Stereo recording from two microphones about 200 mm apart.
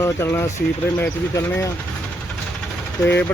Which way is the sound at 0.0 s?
15° left (ahead or behind).